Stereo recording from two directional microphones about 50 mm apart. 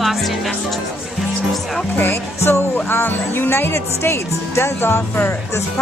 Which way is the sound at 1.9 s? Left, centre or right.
Left.